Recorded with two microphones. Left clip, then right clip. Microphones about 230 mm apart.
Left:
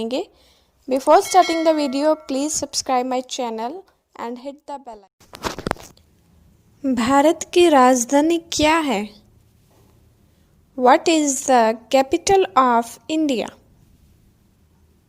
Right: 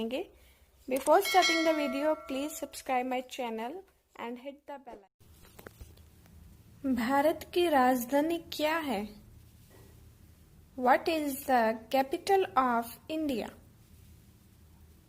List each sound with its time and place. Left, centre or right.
0.0 s a woman's voice: left
1.2 s speech: centre
1.8 s a woman's voice: left
6.8 s a woman's voice: left
10.8 s a woman's voice: left